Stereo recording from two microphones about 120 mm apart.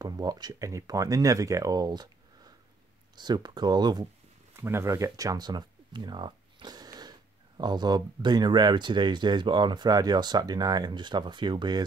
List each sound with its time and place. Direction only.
0.0 s speech: 30° right (ahead or behind)
4.6 s speech: 20° right (ahead or behind); by 11.8 s 40° right (ahead or behind)